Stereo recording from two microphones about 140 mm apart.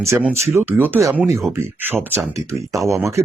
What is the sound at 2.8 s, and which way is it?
Speech, 20° right (ahead or behind).